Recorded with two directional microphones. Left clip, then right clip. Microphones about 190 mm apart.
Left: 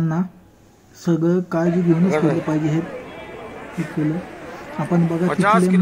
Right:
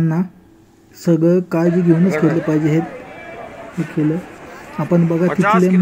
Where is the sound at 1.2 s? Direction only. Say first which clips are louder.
Right 4 dB; 15° right (ahead or behind).